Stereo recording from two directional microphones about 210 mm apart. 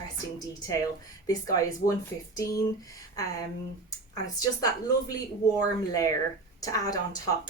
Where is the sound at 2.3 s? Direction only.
15° left (ahead or behind).